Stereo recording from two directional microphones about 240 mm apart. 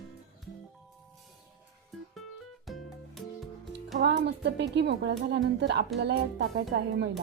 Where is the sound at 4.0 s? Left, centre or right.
Right.